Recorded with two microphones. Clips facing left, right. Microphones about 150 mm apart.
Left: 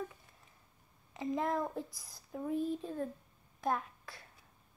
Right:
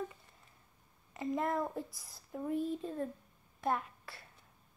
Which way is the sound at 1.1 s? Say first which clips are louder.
Even; centre (ahead or behind).